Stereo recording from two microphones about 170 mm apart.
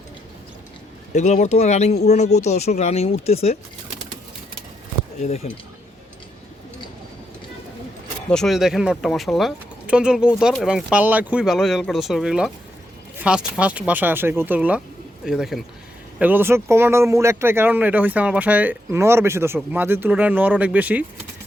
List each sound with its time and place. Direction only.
1.1 s speech: 45° left (ahead or behind)
5.2 s speech: 40° left (ahead or behind)
8.3 s speech: centre (ahead or behind)